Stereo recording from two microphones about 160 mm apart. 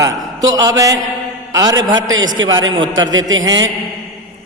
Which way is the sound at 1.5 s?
25° right (ahead or behind).